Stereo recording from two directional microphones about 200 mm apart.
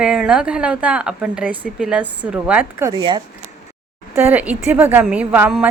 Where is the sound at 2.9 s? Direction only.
20° right (ahead or behind).